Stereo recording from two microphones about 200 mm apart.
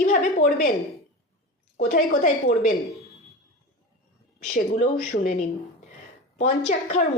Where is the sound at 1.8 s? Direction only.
45° left (ahead or behind).